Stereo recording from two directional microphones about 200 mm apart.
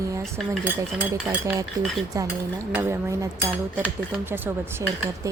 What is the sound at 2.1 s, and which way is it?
Speech, 15° right (ahead or behind).